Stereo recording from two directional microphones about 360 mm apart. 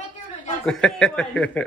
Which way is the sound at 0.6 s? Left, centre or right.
Centre.